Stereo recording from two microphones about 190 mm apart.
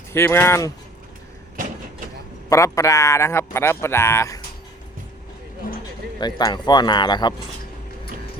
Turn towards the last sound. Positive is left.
turn(degrees=25)  # may be behind; listen again after turning